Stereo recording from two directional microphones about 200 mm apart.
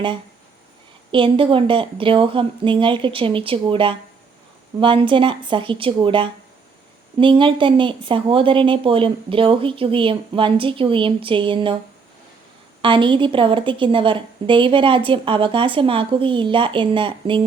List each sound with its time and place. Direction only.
1.1 s speech: 25° right (ahead or behind)
12.8 s speech: 25° right (ahead or behind)